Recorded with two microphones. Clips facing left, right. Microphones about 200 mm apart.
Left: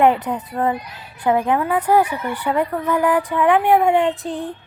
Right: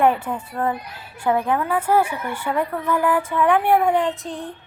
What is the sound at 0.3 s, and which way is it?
Speech, 15° left (ahead or behind).